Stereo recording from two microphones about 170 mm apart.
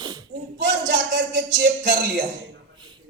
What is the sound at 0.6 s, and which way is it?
A man's voice, 90° right.